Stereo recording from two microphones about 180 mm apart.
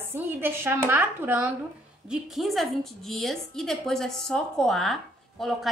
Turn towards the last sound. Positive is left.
turn(degrees=0)  # may be behind; listen again after turning